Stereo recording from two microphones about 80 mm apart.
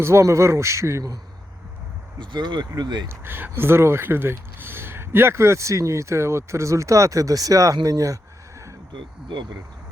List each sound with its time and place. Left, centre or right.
0.0 s speech: right
2.1 s speech: right
3.1 s speech: right